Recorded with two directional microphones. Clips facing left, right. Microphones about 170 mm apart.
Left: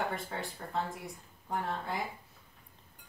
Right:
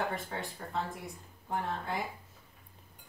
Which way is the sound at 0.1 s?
Centre (ahead or behind).